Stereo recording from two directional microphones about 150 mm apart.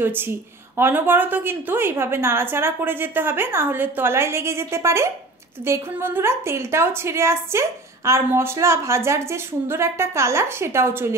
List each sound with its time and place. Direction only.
0.0 s a woman's voice: 15° right (ahead or behind)